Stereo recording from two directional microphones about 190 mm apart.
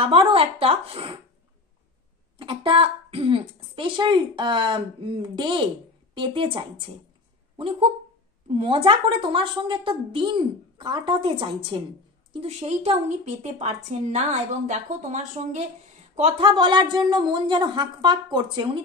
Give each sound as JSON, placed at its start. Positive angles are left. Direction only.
{"t": 0.0, "sound": "a woman's voice", "side_deg": -30}
{"t": 2.3, "sound": "a woman's voice", "side_deg": -25}
{"t": 16.4, "sound": "a woman's voice", "side_deg": -25}